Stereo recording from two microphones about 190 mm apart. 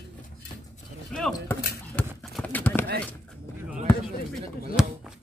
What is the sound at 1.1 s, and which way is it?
Speech, 5° left (ahead or behind).